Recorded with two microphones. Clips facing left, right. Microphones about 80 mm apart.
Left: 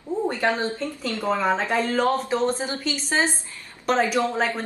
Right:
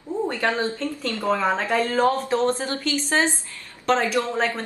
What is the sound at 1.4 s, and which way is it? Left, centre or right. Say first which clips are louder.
A woman's voice: even; centre.